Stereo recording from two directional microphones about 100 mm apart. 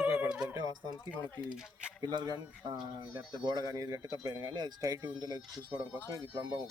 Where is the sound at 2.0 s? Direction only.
45° right (ahead or behind).